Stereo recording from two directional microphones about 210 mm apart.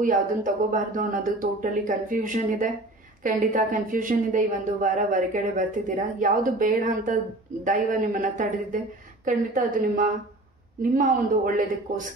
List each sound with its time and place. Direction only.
0.0 s a woman's voice: 40° right (ahead or behind)